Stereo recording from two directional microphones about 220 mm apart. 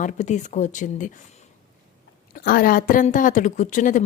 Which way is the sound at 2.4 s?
40° left (ahead or behind).